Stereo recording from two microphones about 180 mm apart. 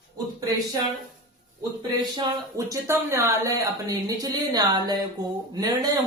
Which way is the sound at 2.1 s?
20° right (ahead or behind).